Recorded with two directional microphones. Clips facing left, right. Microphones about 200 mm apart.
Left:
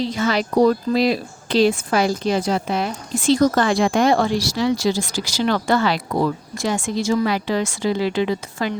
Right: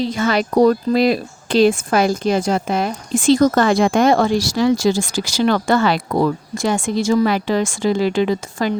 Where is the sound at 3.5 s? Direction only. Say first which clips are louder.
Right 3 dB; 50° right (ahead or behind).